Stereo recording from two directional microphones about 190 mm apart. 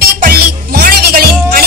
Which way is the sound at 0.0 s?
55° right (ahead or behind).